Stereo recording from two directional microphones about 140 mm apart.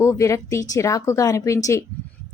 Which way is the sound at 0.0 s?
20° left (ahead or behind).